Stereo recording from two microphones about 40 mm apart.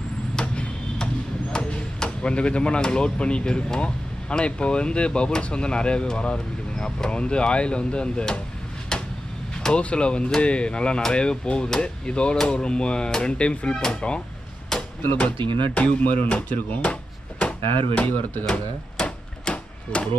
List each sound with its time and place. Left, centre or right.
0.6 s speech: left
9.8 s speech: left
14.7 s hammer: centre
15.1 s speech: left
16.0 s speech: left
16.4 s speech: left
18.5 s a sound: left